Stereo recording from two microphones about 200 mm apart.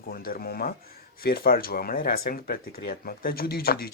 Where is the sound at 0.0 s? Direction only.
45° left (ahead or behind).